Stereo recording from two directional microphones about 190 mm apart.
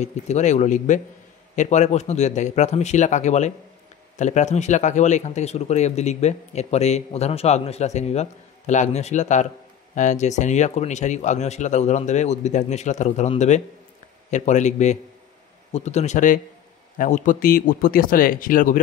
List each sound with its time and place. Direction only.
0.0 s speech: 35° left (ahead or behind)